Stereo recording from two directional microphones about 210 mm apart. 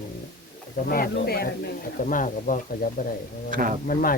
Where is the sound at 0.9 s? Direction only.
45° left (ahead or behind).